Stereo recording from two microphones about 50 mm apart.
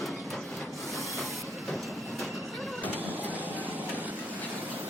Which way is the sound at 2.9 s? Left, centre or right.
Right.